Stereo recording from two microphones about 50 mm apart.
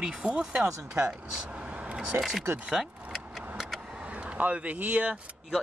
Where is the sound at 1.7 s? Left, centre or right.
Right.